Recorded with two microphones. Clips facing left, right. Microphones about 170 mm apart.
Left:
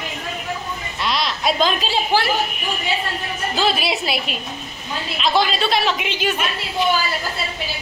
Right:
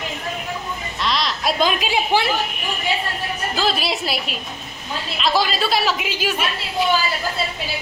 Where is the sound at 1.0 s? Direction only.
5° left (ahead or behind).